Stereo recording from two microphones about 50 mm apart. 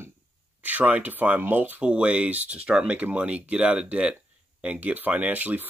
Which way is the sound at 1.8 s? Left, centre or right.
Right.